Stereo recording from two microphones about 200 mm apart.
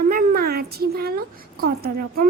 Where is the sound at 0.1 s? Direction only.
45° right (ahead or behind).